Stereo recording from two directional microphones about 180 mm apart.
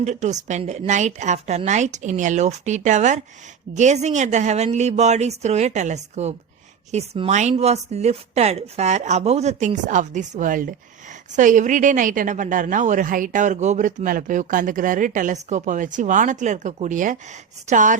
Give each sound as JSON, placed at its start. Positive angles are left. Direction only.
{"t": 0.0, "sound": "a woman's voice", "side_deg": -40}